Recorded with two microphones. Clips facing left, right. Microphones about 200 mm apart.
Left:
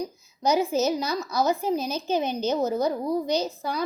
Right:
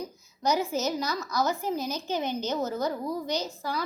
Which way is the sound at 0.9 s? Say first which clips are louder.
Left 4 dB; 15° left (ahead or behind).